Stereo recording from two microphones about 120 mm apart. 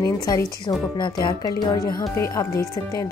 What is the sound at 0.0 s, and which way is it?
A woman's voice, 35° left (ahead or behind).